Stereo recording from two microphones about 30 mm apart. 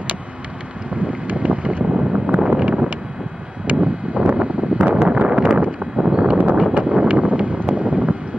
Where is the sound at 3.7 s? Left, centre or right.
Right.